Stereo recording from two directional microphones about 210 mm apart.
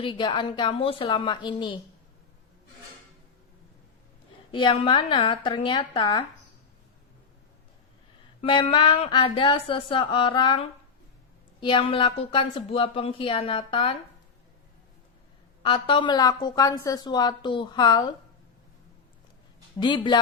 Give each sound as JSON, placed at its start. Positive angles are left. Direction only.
{"t": 0.0, "sound": "a woman's voice", "side_deg": 20}
{"t": 4.5, "sound": "a woman's voice", "side_deg": 25}
{"t": 8.4, "sound": "a woman's voice", "side_deg": 25}
{"t": 15.6, "sound": "a woman's voice", "side_deg": 25}
{"t": 19.8, "sound": "a woman's voice", "side_deg": 20}